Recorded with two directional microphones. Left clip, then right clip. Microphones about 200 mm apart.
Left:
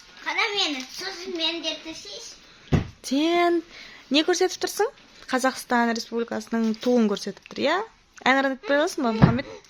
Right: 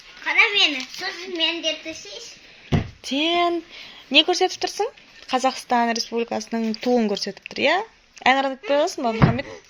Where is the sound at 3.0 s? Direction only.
15° left (ahead or behind).